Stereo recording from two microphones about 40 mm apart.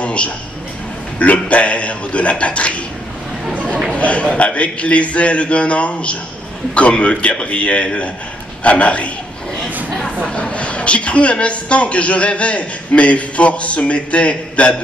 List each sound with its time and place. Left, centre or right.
0.0 s a sound: left
1.2 s a man's voice: left
4.0 s a man's voice: left
10.3 s a man's voice: left